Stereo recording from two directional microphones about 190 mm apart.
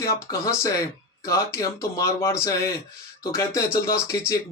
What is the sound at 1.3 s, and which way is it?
Speech, 15° left (ahead or behind).